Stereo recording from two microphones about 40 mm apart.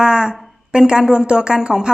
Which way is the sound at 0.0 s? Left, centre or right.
Right.